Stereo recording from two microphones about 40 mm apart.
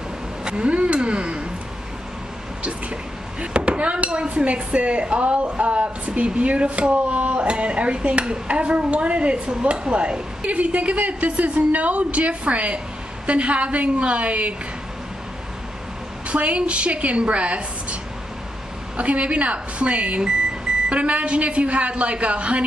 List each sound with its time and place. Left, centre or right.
0.5 s a sound: right
2.6 s speech: right
16.3 s a woman's voice: right
18.9 s speech: right